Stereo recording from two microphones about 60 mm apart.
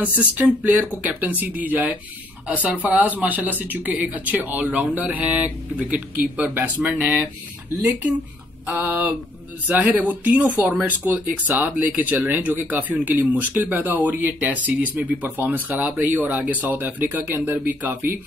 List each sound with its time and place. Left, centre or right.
0.0 s speech: right
8.6 s speech: right